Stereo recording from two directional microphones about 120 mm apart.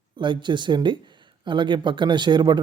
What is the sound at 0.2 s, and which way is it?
Speech, 40° right (ahead or behind).